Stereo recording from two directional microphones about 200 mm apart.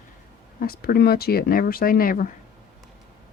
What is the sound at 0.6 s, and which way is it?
Speech, 50° left (ahead or behind).